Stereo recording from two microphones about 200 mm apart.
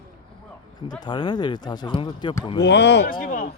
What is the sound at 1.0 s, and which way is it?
Speech, 20° left (ahead or behind).